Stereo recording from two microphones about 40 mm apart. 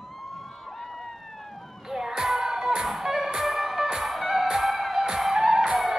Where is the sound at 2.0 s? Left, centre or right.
Centre.